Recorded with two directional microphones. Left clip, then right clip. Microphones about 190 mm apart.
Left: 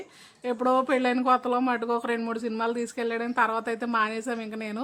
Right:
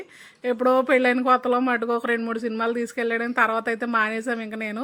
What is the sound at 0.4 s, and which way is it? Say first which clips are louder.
Speech: right 4 dB; 10° right (ahead or behind).